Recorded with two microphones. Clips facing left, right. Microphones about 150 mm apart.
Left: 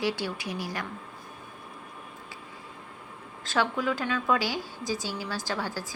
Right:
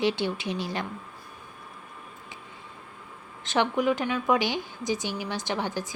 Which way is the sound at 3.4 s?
20° right (ahead or behind).